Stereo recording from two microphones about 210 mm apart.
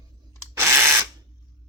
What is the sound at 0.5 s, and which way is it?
Ratchet, 10° right (ahead or behind).